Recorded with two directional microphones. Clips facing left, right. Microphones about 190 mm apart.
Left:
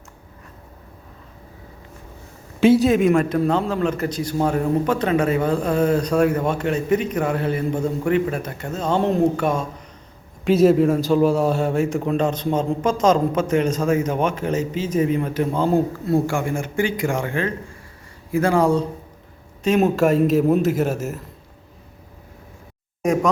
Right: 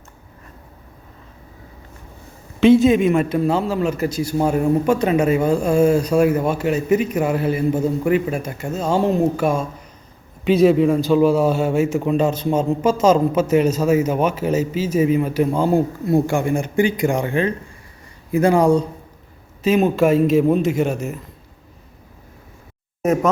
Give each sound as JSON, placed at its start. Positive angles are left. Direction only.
{"t": 2.8, "sound": "speech", "side_deg": 0}
{"t": 19.6, "sound": "speech", "side_deg": 0}